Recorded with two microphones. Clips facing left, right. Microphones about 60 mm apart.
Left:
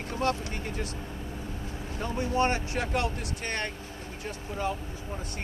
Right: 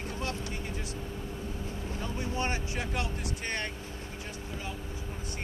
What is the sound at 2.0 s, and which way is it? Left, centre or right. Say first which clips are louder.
Speech: left 7 dB; left.